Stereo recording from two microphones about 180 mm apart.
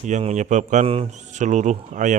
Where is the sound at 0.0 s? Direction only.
40° right (ahead or behind).